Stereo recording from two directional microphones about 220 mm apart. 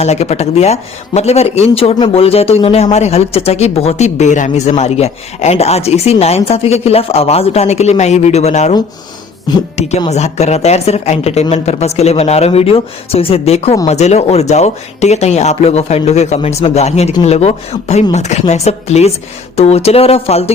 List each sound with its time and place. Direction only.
0.0 s speech: 30° left (ahead or behind)
10.1 s speech: 30° left (ahead or behind)